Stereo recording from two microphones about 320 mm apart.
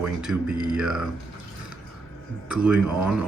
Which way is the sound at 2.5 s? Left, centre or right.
Centre.